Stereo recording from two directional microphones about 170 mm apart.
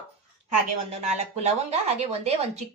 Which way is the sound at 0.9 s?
40° right (ahead or behind).